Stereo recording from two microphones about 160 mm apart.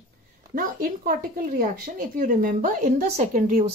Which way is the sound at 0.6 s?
55° right (ahead or behind).